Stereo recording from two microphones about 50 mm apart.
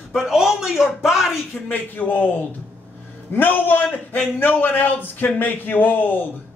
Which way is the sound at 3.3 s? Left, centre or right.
Left.